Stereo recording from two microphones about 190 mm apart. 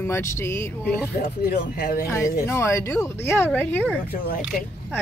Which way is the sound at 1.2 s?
50° left (ahead or behind).